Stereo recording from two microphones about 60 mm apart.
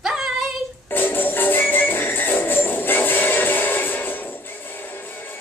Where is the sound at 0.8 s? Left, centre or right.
Left.